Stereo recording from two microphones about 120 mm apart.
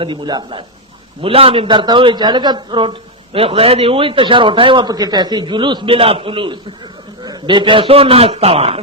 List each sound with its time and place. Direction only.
0.0 s a man's voice: 40° right (ahead or behind)
1.2 s a man's voice: 50° right (ahead or behind)